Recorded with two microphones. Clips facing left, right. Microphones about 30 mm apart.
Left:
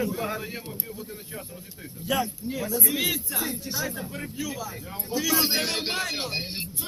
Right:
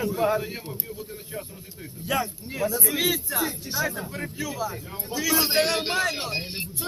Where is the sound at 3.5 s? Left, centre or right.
Right.